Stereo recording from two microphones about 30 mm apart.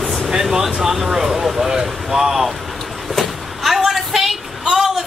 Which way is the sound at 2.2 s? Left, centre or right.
Centre.